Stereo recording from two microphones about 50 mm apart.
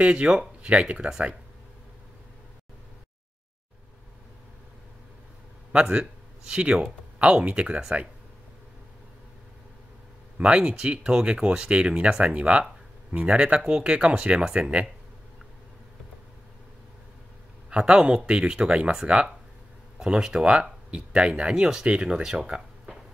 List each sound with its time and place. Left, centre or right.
0.0 s speech: right
5.7 s speech: right
10.3 s speech: centre
17.6 s speech: centre